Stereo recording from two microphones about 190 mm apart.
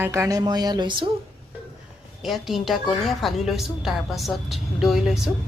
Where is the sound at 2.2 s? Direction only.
Centre (ahead or behind).